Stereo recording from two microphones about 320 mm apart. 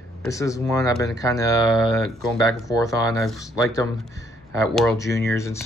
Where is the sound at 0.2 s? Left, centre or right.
Centre.